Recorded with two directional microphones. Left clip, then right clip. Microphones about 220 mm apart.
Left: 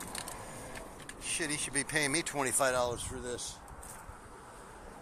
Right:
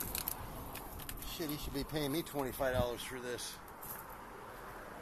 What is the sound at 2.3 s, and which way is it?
Speech, 10° left (ahead or behind).